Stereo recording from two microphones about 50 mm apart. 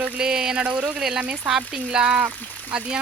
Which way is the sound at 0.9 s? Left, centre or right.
Centre.